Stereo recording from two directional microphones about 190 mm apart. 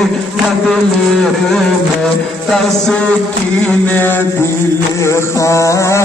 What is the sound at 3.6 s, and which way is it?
Chant, 10° left (ahead or behind).